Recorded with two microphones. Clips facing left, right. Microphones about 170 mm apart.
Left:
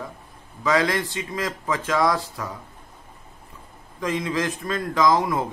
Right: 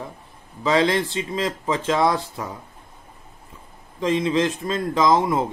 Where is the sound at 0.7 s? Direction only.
25° right (ahead or behind).